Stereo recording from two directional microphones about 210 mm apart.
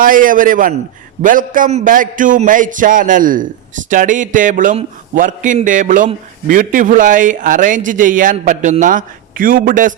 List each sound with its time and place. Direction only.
0.0 s a man's voice: 40° right (ahead or behind)